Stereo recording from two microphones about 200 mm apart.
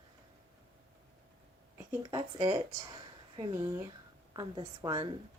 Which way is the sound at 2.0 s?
25° right (ahead or behind).